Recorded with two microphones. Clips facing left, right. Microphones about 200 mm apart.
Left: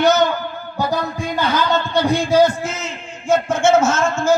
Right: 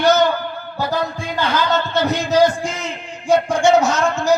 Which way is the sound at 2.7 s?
15° right (ahead or behind).